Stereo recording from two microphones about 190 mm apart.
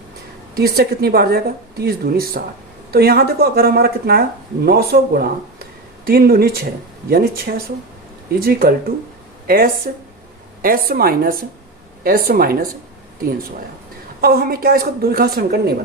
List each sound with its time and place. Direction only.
0.5 s speech: 55° right (ahead or behind)
14.2 s speech: 50° right (ahead or behind)